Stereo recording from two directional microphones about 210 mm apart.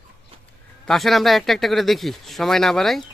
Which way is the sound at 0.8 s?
Centre (ahead or behind).